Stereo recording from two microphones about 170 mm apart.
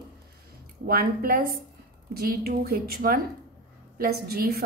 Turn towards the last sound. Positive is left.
turn(degrees=-60)  # may be behind; listen again after turning